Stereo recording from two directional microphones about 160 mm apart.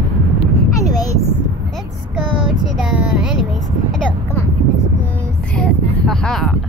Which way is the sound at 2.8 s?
5° right (ahead or behind).